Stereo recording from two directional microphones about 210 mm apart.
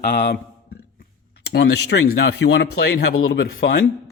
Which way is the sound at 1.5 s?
55° left (ahead or behind).